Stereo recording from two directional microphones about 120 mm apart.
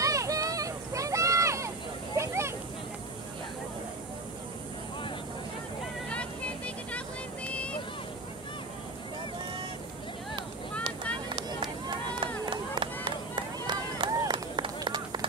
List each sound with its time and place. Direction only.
0.0 s a sound: 30° right (ahead or behind)
6.0 s vehicle: 10° left (ahead or behind)
10.8 s run: 40° right (ahead or behind)
12.4 s chop: 40° right (ahead or behind)
13.7 s run: 40° right (ahead or behind)